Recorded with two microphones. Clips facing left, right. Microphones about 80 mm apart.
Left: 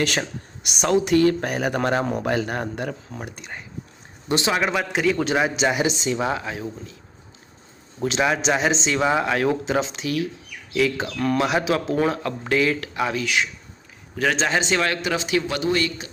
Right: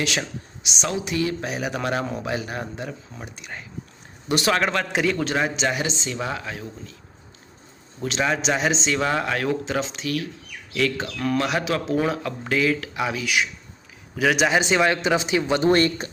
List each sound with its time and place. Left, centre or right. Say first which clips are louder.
0.0 s speech: left 3 dB; left
2.1 s speech: left 4 dB; left
3.4 s speech: even; left
4.5 s a man's voice: even; centre
8.0 s speech: left 2 dB; centre; by 15.6 s right
15.6 s speech: right 4 dB; right